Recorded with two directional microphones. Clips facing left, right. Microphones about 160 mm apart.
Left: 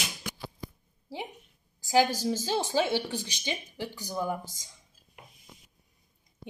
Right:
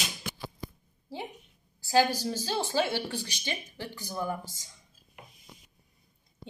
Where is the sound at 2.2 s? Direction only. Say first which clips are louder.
Left 3 dB; 15° left (ahead or behind).